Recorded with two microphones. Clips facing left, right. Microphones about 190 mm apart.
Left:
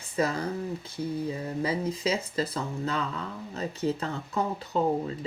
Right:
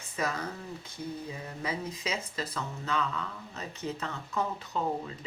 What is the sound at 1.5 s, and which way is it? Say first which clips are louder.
Speech: left 5 dB; 30° left (ahead or behind).